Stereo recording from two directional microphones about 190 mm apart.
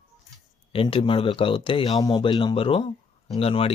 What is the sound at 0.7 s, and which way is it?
Speech, 30° left (ahead or behind).